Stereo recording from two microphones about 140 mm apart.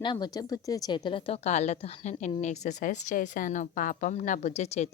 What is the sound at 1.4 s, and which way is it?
Speech, 55° left (ahead or behind).